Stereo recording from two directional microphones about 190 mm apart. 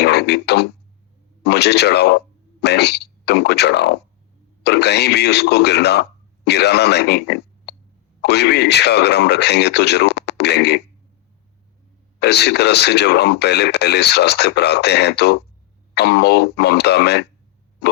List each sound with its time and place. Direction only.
0.0 s a sound: 60° left (ahead or behind)
1.5 s speech: 60° left (ahead or behind)
12.2 s speech: 60° left (ahead or behind)